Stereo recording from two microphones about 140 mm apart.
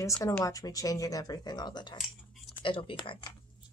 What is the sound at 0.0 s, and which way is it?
Speech, 25° left (ahead or behind).